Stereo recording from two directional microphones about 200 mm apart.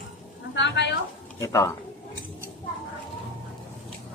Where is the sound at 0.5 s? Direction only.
60° left (ahead or behind).